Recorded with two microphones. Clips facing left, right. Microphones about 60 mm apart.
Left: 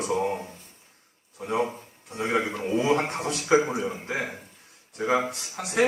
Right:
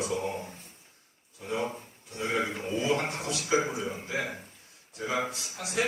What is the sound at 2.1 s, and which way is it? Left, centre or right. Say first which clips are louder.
Speech: left 4 dB; left.